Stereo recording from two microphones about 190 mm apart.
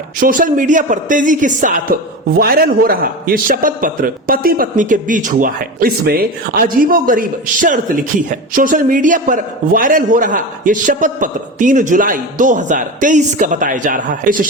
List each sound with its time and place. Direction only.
0.2 s a man's voice: 45° right (ahead or behind)